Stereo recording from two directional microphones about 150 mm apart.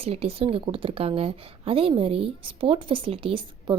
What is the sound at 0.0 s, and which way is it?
A woman's voice, 40° right (ahead or behind).